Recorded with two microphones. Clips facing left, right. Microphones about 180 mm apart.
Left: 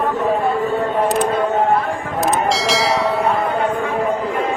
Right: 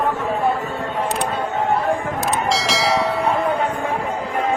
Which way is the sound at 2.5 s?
Centre (ahead or behind).